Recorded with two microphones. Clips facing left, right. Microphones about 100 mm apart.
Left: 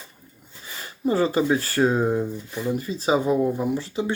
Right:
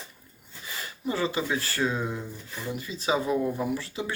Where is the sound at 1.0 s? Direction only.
40° left (ahead or behind).